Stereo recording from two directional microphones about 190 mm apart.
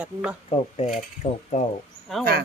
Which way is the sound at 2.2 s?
50° right (ahead or behind).